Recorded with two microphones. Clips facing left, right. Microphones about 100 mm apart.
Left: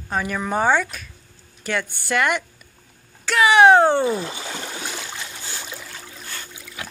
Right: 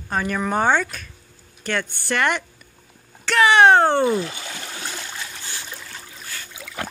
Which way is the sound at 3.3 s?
10° left (ahead or behind).